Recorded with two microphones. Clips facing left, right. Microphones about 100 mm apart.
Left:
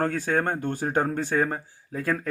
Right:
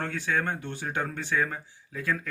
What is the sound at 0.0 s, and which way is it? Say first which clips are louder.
Speech: left 5 dB; 40° left (ahead or behind).